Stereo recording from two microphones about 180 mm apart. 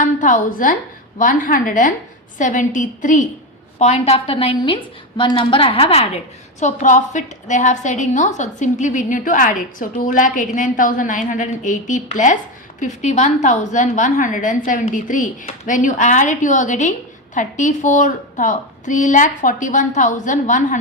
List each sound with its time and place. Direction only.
0.0 s a woman's voice: 45° left (ahead or behind)